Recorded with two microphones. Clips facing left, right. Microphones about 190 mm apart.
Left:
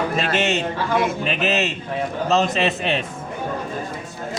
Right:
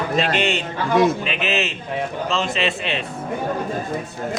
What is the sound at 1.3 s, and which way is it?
A man's voice, 40° left (ahead or behind).